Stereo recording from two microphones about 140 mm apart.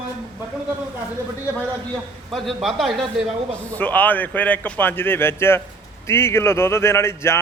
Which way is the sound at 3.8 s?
10° left (ahead or behind).